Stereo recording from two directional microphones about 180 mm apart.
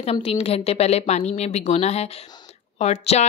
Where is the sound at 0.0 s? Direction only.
35° left (ahead or behind).